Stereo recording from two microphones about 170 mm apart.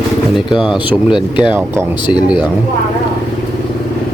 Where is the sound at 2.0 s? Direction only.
25° left (ahead or behind).